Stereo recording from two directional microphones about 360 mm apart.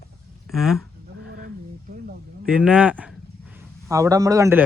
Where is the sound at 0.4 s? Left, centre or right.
Centre.